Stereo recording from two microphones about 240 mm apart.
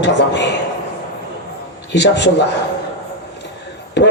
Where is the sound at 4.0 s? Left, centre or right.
Left.